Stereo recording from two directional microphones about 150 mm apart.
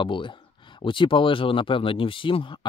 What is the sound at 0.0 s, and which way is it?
Speech, 35° left (ahead or behind).